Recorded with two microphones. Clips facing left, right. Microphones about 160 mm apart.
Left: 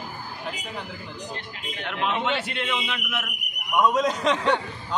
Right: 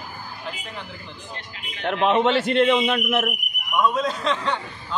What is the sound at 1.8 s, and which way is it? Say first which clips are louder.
A man's voice: right 8 dB; 50° right (ahead or behind).